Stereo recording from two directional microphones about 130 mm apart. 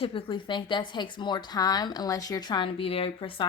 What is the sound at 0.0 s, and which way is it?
Speech, 40° left (ahead or behind).